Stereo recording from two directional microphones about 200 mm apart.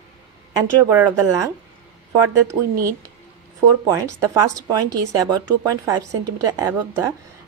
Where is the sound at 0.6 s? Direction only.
15° right (ahead or behind).